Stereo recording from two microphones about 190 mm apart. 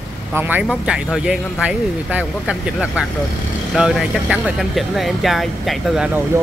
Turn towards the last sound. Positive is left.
turn(degrees=-5)  # may be behind; listen again after turning